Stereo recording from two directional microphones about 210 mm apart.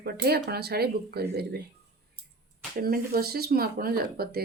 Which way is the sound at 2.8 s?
45° right (ahead or behind).